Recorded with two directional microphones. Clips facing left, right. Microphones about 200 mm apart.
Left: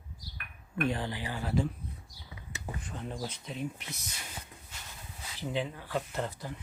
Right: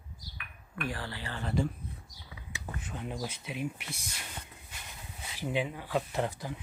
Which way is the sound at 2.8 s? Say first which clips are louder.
Right 2 dB; 5° right (ahead or behind).